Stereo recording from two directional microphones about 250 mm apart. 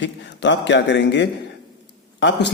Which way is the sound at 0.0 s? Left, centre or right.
Left.